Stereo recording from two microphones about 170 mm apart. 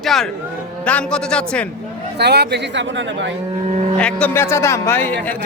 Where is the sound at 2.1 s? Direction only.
75° right (ahead or behind).